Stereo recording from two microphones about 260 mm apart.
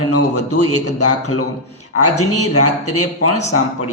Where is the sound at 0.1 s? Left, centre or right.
Left.